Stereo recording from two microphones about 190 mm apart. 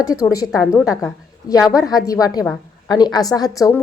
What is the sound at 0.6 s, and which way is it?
A woman's voice, 15° left (ahead or behind).